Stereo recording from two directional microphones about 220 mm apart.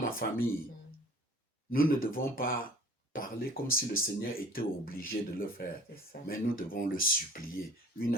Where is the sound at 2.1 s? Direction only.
40° left (ahead or behind).